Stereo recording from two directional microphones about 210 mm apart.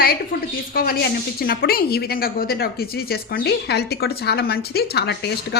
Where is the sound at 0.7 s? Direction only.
45° left (ahead or behind).